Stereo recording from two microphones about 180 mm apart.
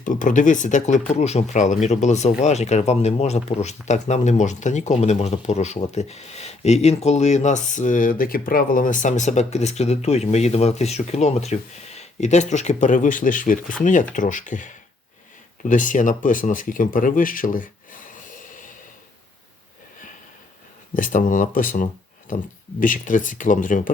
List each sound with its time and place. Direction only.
0.0 s speech: 45° left (ahead or behind)
20.9 s speech: 50° left (ahead or behind)